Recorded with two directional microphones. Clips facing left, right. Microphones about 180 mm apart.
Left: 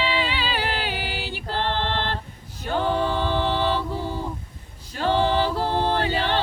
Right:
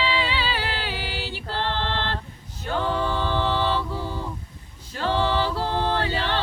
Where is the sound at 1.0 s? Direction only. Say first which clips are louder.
Left 1 dB; 55° left (ahead or behind).